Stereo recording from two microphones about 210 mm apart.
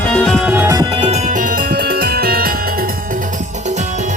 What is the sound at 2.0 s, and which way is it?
Music, 45° right (ahead or behind).